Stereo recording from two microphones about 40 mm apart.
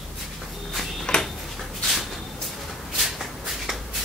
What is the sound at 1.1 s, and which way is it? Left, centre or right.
Tick-tock, left.